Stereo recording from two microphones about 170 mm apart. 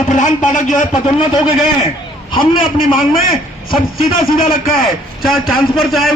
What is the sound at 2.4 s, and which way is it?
A man's voice, 55° left (ahead or behind).